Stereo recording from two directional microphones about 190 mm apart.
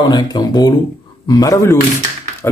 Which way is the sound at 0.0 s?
20° left (ahead or behind).